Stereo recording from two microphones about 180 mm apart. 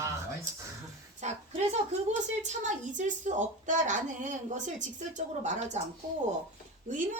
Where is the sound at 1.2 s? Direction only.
40° right (ahead or behind).